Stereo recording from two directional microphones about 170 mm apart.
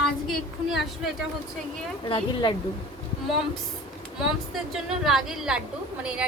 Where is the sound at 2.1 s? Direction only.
30° left (ahead or behind).